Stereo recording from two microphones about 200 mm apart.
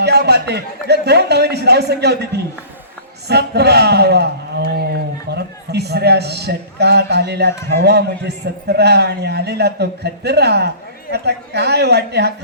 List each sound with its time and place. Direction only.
0.0 s a man's voice: 55° right (ahead or behind)